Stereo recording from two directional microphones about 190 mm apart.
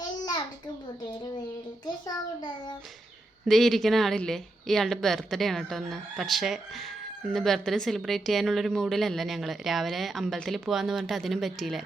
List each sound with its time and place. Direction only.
1.8 s a child's voice: 20° left (ahead or behind)
3.4 s speech: centre (ahead or behind)